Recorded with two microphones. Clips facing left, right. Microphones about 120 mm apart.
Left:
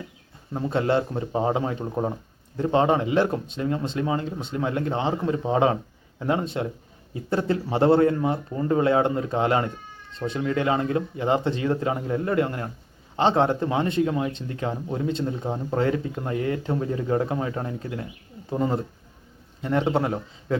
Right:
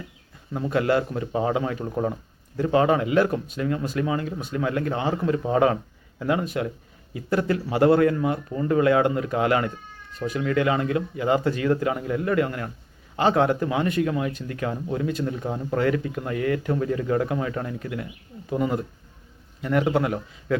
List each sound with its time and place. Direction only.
0.5 s speech: 25° left (ahead or behind)